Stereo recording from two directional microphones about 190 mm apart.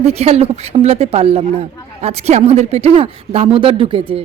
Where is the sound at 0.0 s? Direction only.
30° right (ahead or behind).